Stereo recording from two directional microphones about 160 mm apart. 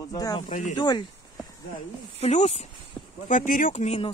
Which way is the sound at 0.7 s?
25° left (ahead or behind).